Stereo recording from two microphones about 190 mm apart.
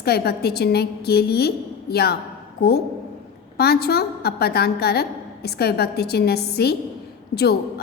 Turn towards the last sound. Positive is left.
turn(degrees=55)  # may be behind; listen again after turning